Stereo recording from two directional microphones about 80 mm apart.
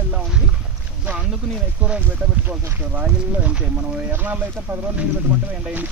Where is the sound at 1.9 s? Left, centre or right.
Centre.